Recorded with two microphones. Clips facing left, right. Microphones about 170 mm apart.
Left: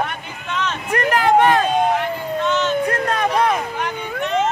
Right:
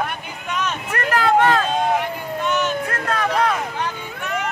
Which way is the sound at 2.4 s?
10° right (ahead or behind).